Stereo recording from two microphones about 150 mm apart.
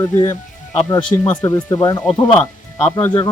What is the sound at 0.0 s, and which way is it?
Speech, 20° left (ahead or behind).